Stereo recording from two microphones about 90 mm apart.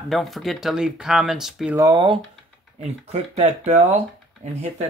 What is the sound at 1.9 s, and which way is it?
Speech, 60° right (ahead or behind).